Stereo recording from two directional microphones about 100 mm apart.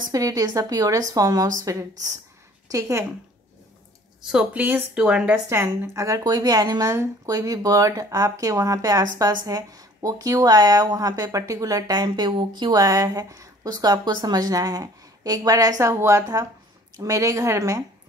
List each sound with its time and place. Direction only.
0.1 s a woman's voice: 35° right (ahead or behind)
4.3 s speech: 10° right (ahead or behind)
5.5 s a woman's voice: 25° right (ahead or behind)